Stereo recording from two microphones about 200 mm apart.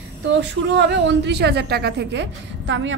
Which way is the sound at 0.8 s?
60° right (ahead or behind).